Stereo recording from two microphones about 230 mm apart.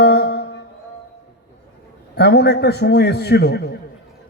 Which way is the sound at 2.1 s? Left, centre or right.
Left.